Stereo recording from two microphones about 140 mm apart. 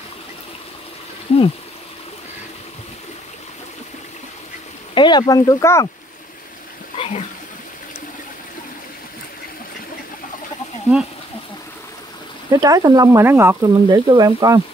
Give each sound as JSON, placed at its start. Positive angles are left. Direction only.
{"t": 4.9, "sound": "speech", "side_deg": 30}
{"t": 7.0, "sound": "a sound", "side_deg": 50}
{"t": 10.9, "sound": "speech", "side_deg": -5}
{"t": 12.5, "sound": "speech", "side_deg": -25}
{"t": 13.9, "sound": "speech", "side_deg": -30}